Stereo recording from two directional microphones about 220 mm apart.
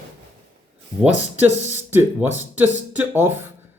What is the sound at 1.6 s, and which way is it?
Speech, 30° right (ahead or behind).